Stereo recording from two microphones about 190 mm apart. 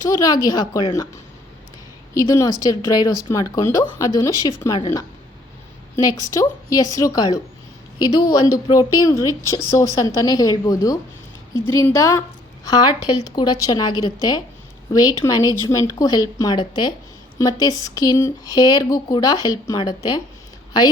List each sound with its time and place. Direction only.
0.0 s speech: 20° left (ahead or behind)